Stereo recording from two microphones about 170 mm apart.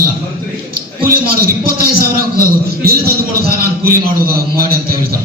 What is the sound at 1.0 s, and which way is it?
A man's voice, 60° right (ahead or behind).